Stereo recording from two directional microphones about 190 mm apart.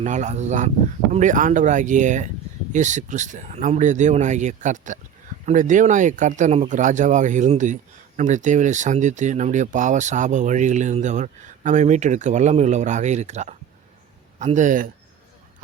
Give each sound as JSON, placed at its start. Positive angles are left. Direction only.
{"t": 0.0, "sound": "speech", "side_deg": -40}